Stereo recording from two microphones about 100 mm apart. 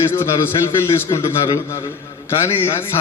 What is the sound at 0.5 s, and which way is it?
Speech, 45° left (ahead or behind).